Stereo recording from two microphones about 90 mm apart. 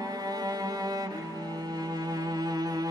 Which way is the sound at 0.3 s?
45° right (ahead or behind).